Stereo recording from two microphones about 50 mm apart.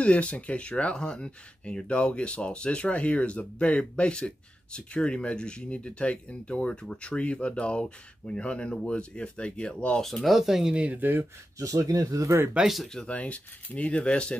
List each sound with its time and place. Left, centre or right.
0.0 s speech: left
10.0 s speech: centre
10.9 s speech: right
12.3 s speech: right
13.0 s speech: left